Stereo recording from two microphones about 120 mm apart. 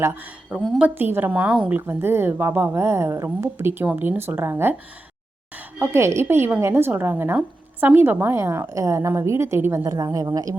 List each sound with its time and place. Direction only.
0.5 s a woman's voice: 10° right (ahead or behind)
1.9 s a woman's voice: 20° right (ahead or behind)
5.8 s a woman's voice: 20° right (ahead or behind)